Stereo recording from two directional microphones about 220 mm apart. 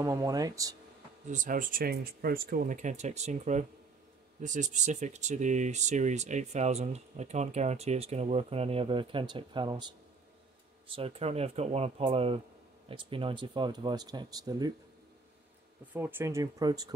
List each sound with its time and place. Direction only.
0.0 s speech: 15° right (ahead or behind)
1.3 s speech: 35° right (ahead or behind); by 14.7 s 15° right (ahead or behind)
15.9 s speech: 10° right (ahead or behind)